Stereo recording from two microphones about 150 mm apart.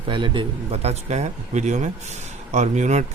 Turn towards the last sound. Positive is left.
turn(degrees=-50)  # may be behind; listen again after turning